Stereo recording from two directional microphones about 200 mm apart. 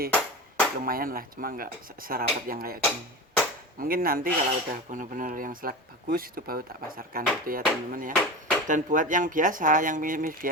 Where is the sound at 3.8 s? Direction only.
45° right (ahead or behind).